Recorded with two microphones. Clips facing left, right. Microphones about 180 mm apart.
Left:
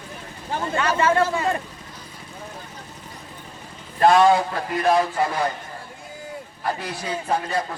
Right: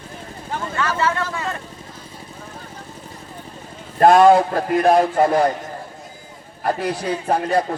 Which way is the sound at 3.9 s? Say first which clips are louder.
Right 4 dB; 50° right (ahead or behind).